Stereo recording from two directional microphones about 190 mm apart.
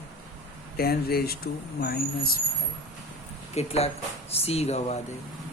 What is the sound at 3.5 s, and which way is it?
Speech, 35° left (ahead or behind).